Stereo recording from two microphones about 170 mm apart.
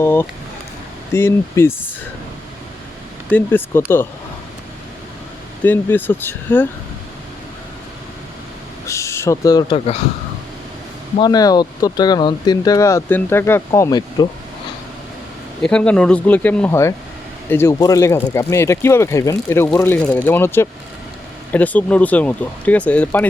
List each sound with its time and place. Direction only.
0.0 s speech: 15° left (ahead or behind)
3.2 s speech: 10° left (ahead or behind)
5.6 s speech: 10° left (ahead or behind)
8.9 s speech: 15° left (ahead or behind); by 10.0 s 35° left (ahead or behind)
11.2 s speech: 25° left (ahead or behind)
15.6 s speech: 5° left (ahead or behind)